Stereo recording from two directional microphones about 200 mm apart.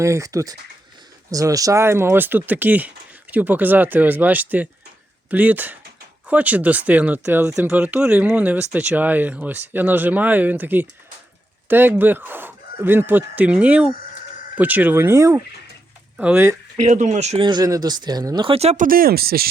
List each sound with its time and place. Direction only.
0.0 s speech: 15° right (ahead or behind)
16.8 s speech: 35° right (ahead or behind)